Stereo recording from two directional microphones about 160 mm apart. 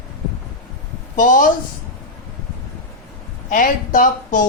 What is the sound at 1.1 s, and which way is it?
Speech, 55° left (ahead or behind).